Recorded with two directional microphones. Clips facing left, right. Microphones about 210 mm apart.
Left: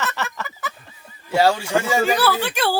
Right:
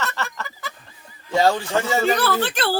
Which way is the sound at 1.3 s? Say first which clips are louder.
Left 1 dB; 10° left (ahead or behind).